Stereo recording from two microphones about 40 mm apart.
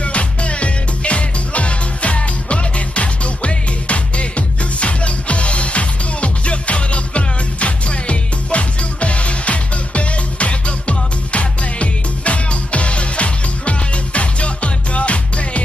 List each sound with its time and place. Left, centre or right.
0.0 s music: left